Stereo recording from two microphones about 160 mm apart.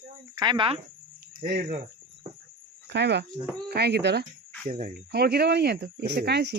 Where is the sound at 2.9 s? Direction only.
90° right.